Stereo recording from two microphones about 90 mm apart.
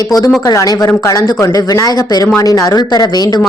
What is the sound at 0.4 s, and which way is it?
A woman's voice, 45° left (ahead or behind).